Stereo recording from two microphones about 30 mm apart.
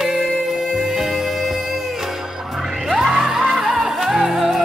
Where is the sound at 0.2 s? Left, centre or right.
Centre.